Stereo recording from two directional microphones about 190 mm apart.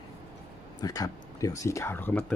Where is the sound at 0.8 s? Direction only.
20° left (ahead or behind).